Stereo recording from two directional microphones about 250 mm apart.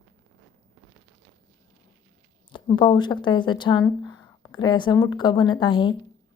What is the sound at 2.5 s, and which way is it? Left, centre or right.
A woman's voice, centre.